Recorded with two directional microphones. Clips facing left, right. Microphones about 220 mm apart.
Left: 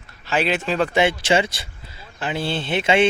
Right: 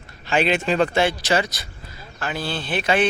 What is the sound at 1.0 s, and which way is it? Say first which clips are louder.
Speech: left 2 dB; 25° left (ahead or behind).